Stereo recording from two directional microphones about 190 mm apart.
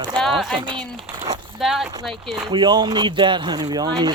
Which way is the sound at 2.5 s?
25° right (ahead or behind).